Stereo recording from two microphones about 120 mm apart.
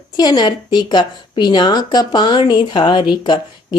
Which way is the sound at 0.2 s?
35° left (ahead or behind).